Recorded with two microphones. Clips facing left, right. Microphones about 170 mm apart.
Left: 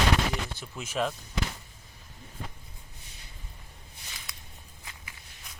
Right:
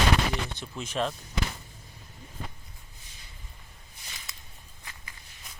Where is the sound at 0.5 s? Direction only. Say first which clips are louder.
Even; 5° left (ahead or behind).